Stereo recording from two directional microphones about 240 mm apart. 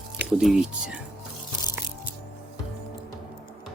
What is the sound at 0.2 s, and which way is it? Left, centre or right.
Speech, centre.